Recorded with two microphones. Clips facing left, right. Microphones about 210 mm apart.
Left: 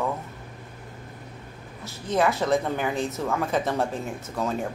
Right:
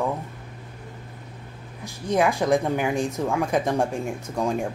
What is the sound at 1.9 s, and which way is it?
A woman's voice, 15° right (ahead or behind).